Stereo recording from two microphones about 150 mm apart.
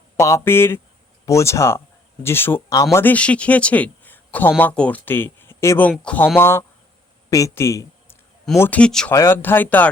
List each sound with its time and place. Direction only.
0.2 s speech: 20° left (ahead or behind)
9.1 s speech: 15° left (ahead or behind)